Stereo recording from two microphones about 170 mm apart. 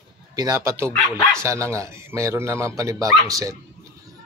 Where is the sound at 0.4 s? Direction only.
20° right (ahead or behind).